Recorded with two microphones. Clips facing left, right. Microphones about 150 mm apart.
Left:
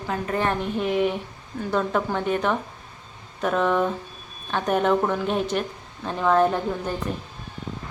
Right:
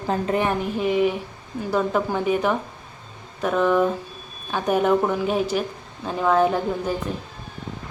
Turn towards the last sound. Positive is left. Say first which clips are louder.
# right 2 dB
turn(degrees=-5)  # may be behind; listen again after turning